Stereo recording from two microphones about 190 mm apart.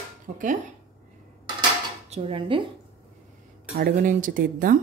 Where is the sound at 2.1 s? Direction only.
30° right (ahead or behind).